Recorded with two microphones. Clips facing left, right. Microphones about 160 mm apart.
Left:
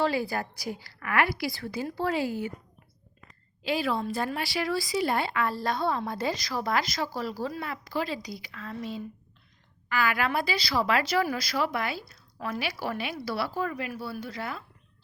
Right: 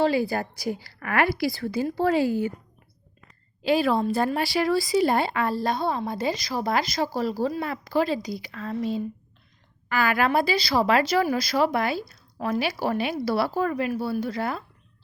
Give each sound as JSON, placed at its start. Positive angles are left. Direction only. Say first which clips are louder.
{"t": 0.0, "sound": "a woman's voice", "louder": "right 5 dB", "side_deg": -25}
{"t": 3.6, "sound": "speech", "louder": "right 7 dB", "side_deg": -45}